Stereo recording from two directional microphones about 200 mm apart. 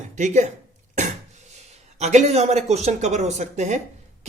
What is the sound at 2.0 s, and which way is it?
Speech, 35° right (ahead or behind).